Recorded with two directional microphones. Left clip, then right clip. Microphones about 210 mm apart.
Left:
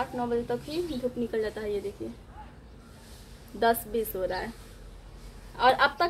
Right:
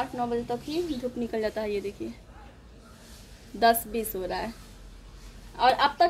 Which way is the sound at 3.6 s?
20° right (ahead or behind).